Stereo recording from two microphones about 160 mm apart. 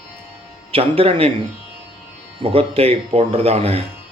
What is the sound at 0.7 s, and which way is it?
Speech, 35° right (ahead or behind).